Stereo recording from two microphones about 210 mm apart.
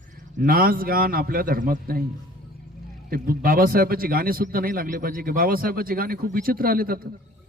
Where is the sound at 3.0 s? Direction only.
45° right (ahead or behind).